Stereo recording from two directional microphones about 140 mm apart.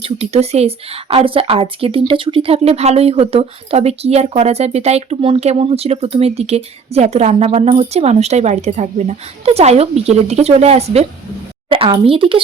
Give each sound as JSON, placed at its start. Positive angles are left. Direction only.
{"t": 0.0, "sound": "speech", "side_deg": -50}